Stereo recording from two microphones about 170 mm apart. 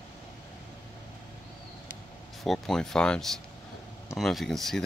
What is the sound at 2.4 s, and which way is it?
Speech, centre (ahead or behind).